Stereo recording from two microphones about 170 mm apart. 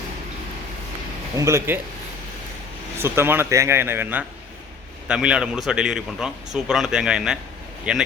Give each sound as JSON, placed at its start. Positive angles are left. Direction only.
{"t": 1.4, "sound": "a man's voice", "side_deg": -15}
{"t": 3.0, "sound": "a man's voice", "side_deg": -15}